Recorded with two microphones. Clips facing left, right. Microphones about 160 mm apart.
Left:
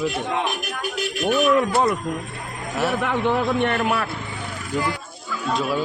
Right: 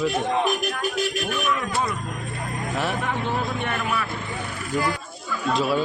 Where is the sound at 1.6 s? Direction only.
60° left (ahead or behind).